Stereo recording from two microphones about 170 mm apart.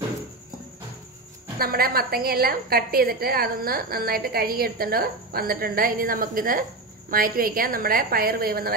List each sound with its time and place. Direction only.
1.6 s a woman's voice: 60° right (ahead or behind)